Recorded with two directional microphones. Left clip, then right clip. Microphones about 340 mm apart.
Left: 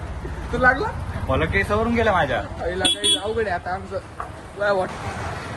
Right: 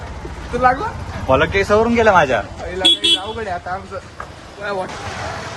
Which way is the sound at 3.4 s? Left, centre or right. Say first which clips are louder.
Right 1 dB; centre.